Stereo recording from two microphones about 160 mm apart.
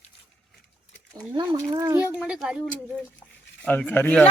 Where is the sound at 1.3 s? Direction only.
20° right (ahead or behind).